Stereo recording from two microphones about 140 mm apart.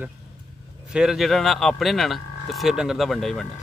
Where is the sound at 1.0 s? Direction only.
Centre (ahead or behind).